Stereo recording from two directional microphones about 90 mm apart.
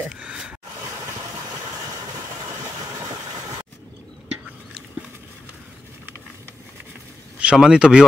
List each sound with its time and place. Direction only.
0.1 s a sound: 10° right (ahead or behind)
1.7 s vehicle: 45° right (ahead or behind)
7.3 s speech: 10° right (ahead or behind)